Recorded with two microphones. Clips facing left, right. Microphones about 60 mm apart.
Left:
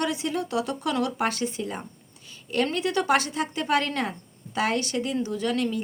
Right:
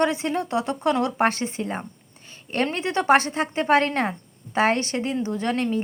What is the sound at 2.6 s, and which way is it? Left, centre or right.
Speech, right.